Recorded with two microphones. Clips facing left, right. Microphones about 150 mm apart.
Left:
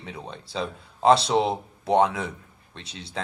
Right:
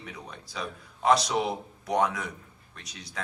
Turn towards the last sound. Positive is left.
turn(degrees=25)  # may be behind; listen again after turning